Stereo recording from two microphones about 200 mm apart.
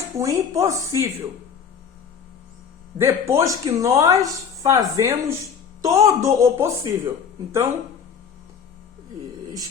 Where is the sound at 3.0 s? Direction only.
15° right (ahead or behind).